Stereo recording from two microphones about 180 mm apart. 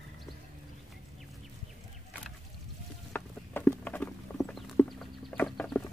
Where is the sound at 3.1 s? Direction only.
10° left (ahead or behind).